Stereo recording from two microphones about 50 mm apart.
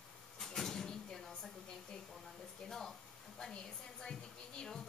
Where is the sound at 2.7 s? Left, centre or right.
Centre.